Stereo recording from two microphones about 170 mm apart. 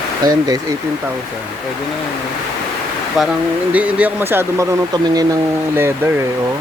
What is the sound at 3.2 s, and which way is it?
Speech, centre (ahead or behind).